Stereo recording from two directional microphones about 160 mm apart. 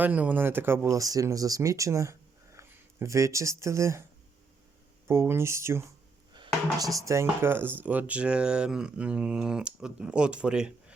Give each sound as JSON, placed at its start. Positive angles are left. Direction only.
{"t": 0.0, "sound": "speech", "side_deg": -10}
{"t": 5.0, "sound": "speech", "side_deg": -15}